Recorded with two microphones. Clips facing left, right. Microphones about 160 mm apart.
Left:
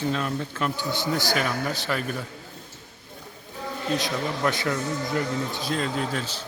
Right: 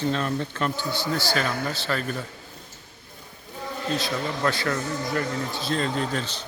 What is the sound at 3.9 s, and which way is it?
A man's voice, 20° left (ahead or behind).